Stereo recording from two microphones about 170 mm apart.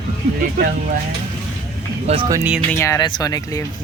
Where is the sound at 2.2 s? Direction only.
20° right (ahead or behind).